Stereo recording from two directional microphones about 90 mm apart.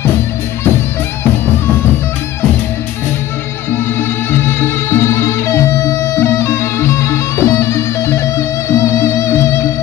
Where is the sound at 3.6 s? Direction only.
25° left (ahead or behind).